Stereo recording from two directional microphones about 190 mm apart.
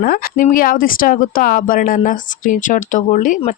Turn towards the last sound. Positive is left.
turn(degrees=40)  # may be behind; listen again after turning